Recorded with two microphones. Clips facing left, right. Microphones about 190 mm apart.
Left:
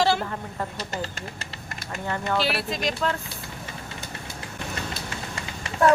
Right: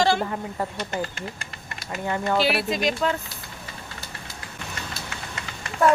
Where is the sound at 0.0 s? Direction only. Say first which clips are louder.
Right 1 dB; 5° left (ahead or behind).